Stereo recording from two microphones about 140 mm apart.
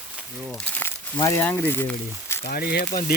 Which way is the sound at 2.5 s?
90° left.